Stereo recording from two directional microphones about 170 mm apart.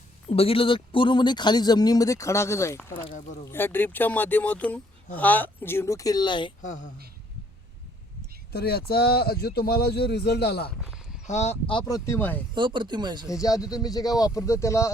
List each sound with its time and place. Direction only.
0.3 s speech: 35° left (ahead or behind)
6.6 s a woman's voice: 50° left (ahead or behind)
8.5 s a man's voice: 65° left (ahead or behind)
10.8 s a sound: 5° right (ahead or behind)
11.3 s speech: 40° left (ahead or behind)
11.9 s speech: 20° left (ahead or behind)
12.5 s speech: 30° right (ahead or behind)
13.3 s speech: 20° left (ahead or behind)